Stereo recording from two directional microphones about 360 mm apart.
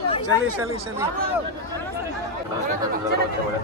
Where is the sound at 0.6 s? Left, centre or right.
Centre.